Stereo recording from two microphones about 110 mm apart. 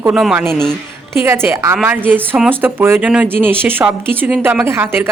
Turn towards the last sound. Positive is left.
turn(degrees=-20)  # may be behind; listen again after turning